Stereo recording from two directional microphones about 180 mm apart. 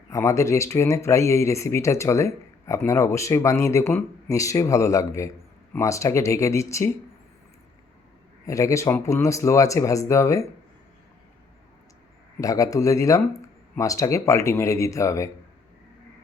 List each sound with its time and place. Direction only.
0.1 s speech: 15° left (ahead or behind)
8.4 s speech: 15° left (ahead or behind)
12.4 s speech: 20° left (ahead or behind)